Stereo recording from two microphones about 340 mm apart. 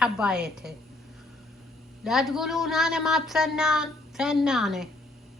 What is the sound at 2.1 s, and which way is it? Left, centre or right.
A woman's voice, centre.